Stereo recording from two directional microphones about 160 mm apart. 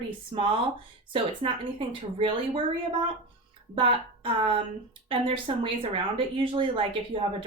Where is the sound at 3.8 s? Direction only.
35° right (ahead or behind).